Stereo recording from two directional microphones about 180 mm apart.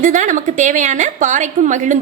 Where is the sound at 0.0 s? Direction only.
45° right (ahead or behind).